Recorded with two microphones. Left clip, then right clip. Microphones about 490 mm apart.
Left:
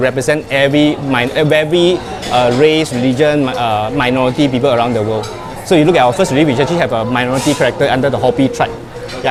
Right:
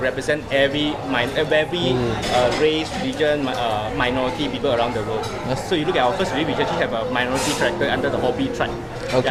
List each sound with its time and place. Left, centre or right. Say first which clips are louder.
0.0 s speech: left 8 dB; left